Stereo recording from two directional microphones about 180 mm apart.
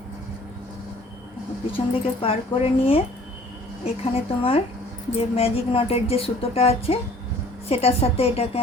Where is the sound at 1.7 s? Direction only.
30° left (ahead or behind).